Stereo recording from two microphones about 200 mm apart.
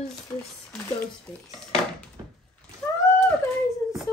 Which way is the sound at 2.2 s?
15° right (ahead or behind).